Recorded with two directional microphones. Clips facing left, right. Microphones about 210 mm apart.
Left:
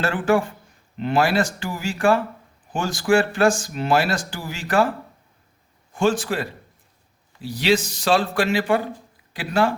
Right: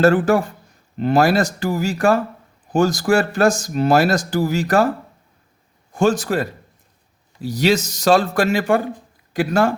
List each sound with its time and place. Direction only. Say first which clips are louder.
0.0 s speech: right 6 dB; 40° right (ahead or behind)